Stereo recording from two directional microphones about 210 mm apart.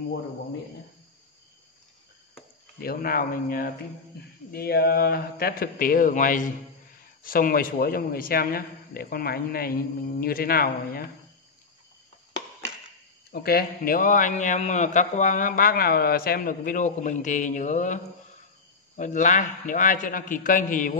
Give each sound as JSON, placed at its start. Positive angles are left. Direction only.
{"t": 2.8, "sound": "a man's voice", "side_deg": 45}
{"t": 13.3, "sound": "a man's voice", "side_deg": 50}